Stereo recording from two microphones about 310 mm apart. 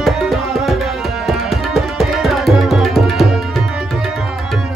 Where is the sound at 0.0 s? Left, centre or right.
Centre.